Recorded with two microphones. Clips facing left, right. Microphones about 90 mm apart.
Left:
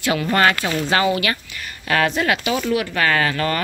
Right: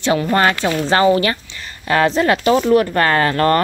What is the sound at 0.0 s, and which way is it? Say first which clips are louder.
Speech: right 2 dB; 25° right (ahead or behind).